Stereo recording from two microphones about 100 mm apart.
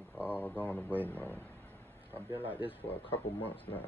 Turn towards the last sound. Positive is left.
turn(degrees=20)  # may be behind; listen again after turning